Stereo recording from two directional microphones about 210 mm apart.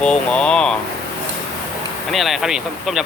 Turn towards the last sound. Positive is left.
turn(degrees=0)  # may be behind; listen again after turning